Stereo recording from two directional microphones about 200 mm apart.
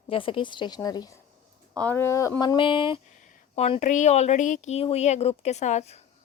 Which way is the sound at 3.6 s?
35° left (ahead or behind).